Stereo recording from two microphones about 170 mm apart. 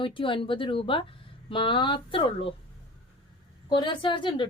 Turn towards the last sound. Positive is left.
turn(degrees=30)  # may be behind; listen again after turning